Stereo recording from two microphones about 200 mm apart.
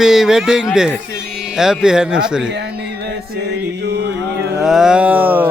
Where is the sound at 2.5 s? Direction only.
55° right (ahead or behind).